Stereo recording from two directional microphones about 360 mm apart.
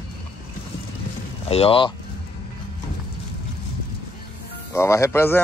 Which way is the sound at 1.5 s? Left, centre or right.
Centre.